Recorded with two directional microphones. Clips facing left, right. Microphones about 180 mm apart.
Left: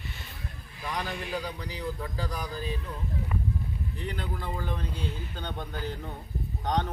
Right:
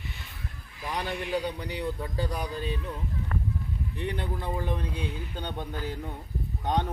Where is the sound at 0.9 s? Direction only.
30° right (ahead or behind).